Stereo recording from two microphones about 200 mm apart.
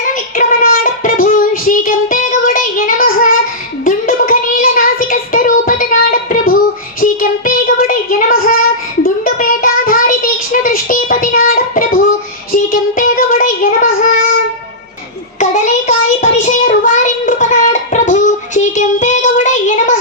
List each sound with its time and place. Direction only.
0.1 s child singing: 45° left (ahead or behind)
15.4 s child singing: 35° left (ahead or behind)